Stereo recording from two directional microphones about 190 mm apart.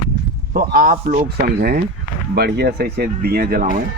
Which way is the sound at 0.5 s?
50° right (ahead or behind).